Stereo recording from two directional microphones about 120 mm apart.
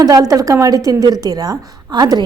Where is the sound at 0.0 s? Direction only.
30° right (ahead or behind).